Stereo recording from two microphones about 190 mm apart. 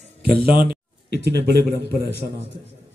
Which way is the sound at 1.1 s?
60° right (ahead or behind).